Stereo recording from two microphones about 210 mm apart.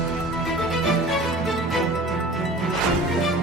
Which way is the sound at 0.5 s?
Centre (ahead or behind).